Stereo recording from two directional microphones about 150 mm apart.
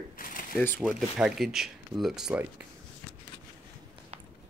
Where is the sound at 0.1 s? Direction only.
65° left (ahead or behind).